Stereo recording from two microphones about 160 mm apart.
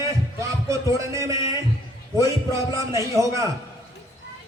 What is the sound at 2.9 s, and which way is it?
Speech, 20° right (ahead or behind).